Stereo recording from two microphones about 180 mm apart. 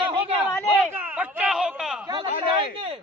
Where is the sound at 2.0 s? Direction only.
25° right (ahead or behind).